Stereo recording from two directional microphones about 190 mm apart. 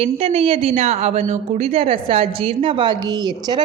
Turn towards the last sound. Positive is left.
turn(degrees=-20)  # may be behind; listen again after turning